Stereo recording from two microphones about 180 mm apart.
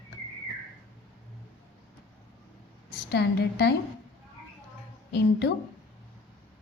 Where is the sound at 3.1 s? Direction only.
70° left (ahead or behind).